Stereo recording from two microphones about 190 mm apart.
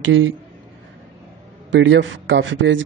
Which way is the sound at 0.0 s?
90° right.